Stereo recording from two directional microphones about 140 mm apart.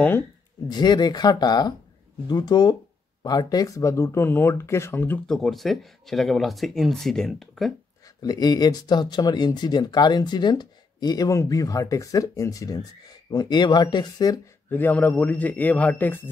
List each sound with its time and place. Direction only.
0.7 s speech: 30° left (ahead or behind); by 5.2 s 15° left (ahead or behind)
5.2 s speech: centre (ahead or behind)
8.2 s speech: 30° left (ahead or behind)
14.7 s a man's voice: 15° left (ahead or behind)